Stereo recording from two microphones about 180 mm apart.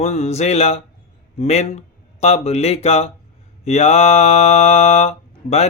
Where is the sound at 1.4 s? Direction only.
35° left (ahead or behind).